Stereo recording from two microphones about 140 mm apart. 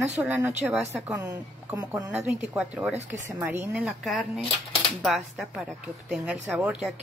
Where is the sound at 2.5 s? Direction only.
5° right (ahead or behind).